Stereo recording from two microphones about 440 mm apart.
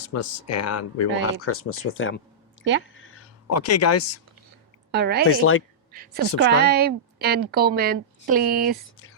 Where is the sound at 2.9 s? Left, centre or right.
Left.